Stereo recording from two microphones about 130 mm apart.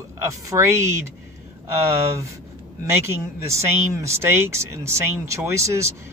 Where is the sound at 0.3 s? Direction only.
25° right (ahead or behind).